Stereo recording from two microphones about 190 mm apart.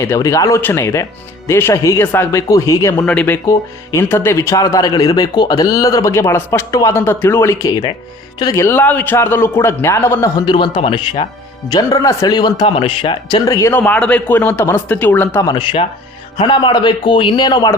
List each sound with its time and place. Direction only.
0.0 s speech: 15° left (ahead or behind)
3.0 s speech: 5° left (ahead or behind)
10.4 s speech: 25° left (ahead or behind)
15.4 s speech: 25° left (ahead or behind)